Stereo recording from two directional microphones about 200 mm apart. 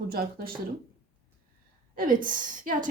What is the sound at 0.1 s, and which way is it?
Speech, 50° right (ahead or behind).